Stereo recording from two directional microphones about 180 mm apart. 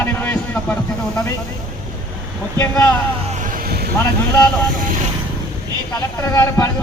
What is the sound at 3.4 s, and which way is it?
Vehicle, 50° right (ahead or behind).